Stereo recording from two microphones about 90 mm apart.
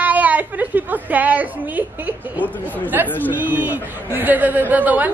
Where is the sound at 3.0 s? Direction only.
20° left (ahead or behind).